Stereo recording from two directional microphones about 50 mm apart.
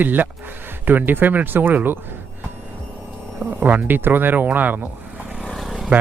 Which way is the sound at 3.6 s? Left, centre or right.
Right.